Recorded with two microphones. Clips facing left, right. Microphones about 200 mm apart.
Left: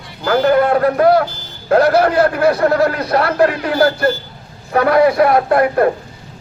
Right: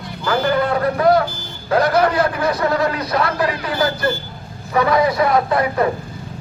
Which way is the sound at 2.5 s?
55° left (ahead or behind).